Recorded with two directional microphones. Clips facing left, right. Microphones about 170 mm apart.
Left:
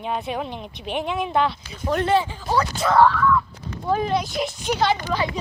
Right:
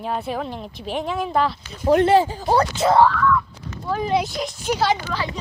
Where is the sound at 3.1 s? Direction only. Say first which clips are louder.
Even; 5° left (ahead or behind).